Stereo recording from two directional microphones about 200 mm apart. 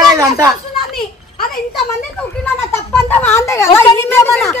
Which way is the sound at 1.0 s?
45° left (ahead or behind).